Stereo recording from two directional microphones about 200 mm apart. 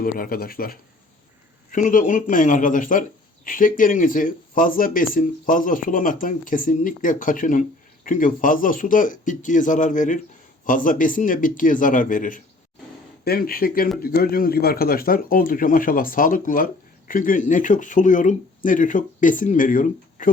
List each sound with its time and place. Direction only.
0.0 s speech: 45° left (ahead or behind)